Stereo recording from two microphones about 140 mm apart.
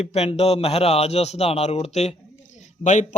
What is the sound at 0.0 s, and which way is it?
Speech, 50° left (ahead or behind).